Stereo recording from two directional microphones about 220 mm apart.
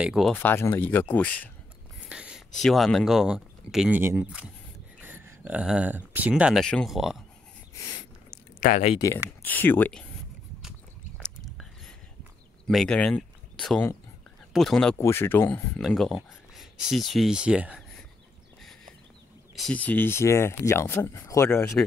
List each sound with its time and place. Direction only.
0.0 s speech: centre (ahead or behind)
2.0 s speech: 5° right (ahead or behind)
8.3 s a sound: 40° left (ahead or behind)
8.8 s speech: 15° left (ahead or behind)
12.6 s speech: 5° left (ahead or behind)
19.5 s speech: 5° left (ahead or behind)